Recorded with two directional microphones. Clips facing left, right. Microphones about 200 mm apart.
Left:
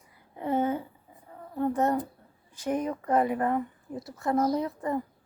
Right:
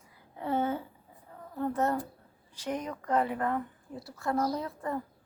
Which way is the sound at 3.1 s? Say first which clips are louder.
Left 3 dB; 15° left (ahead or behind).